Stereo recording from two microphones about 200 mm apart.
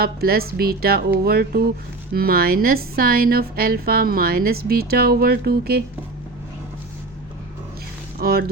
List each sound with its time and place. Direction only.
0.0 s a woman's voice: 50° right (ahead or behind)
8.2 s a woman's voice: 50° right (ahead or behind)